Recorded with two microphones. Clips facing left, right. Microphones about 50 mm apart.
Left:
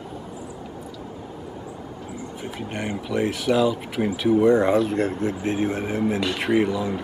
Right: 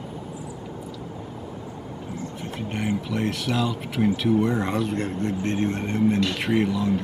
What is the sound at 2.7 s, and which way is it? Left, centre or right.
Speech, centre.